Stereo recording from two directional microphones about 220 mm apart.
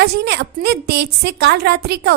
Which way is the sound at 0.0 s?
45° right (ahead or behind).